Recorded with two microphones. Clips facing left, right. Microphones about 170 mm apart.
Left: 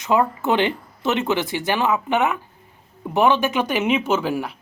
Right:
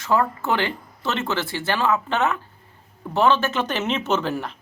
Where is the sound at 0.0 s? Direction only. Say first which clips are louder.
Left 2 dB; 20° left (ahead or behind).